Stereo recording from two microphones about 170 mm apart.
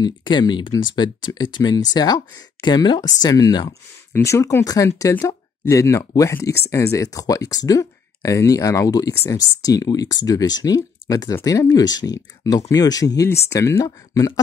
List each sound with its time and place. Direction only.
0.0 s speech: 25° left (ahead or behind)